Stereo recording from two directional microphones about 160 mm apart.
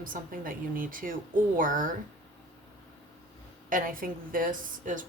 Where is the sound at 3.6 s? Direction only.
60° right (ahead or behind).